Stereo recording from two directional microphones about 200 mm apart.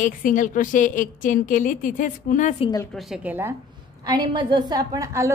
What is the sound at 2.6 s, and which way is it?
Speech, 20° left (ahead or behind).